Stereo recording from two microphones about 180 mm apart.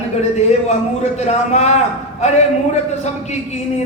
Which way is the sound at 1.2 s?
40° left (ahead or behind).